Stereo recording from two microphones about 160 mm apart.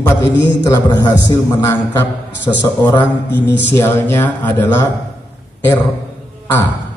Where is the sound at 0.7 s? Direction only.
20° left (ahead or behind).